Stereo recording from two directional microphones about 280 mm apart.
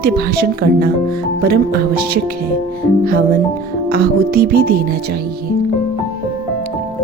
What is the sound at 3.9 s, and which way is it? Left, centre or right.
Speech, right.